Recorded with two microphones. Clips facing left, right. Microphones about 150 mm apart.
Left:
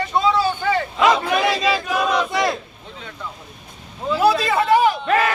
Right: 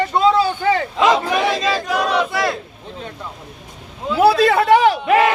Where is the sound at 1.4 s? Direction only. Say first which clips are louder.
Right 1 dB; 10° left (ahead or behind).